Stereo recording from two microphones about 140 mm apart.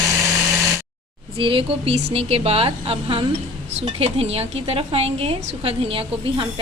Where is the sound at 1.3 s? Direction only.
40° right (ahead or behind).